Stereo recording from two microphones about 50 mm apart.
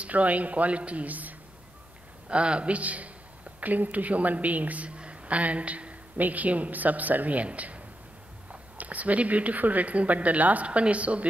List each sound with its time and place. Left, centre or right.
0.0 s speech: right
2.2 s a woman's voice: right